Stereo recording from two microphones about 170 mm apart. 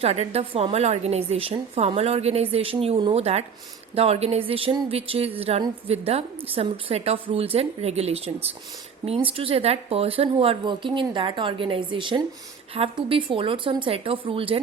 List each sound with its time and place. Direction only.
0.0 s speech: 35° right (ahead or behind)